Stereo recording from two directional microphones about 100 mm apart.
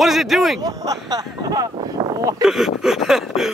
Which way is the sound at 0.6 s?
35° right (ahead or behind).